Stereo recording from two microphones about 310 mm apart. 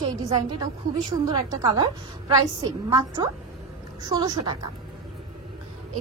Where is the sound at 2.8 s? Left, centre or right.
Centre.